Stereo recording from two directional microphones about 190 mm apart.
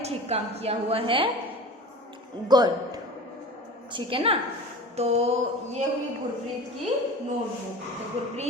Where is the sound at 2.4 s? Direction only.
20° right (ahead or behind).